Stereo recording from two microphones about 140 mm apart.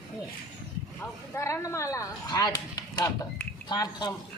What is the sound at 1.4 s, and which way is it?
Speech, 20° left (ahead or behind).